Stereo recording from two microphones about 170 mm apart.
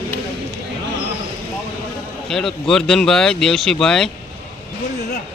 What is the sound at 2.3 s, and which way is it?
Speech, centre (ahead or behind).